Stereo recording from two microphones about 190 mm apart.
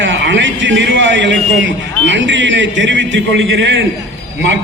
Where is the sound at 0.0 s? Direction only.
70° right (ahead or behind).